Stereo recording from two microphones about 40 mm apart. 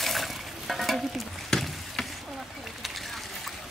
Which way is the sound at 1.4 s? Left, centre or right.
Centre.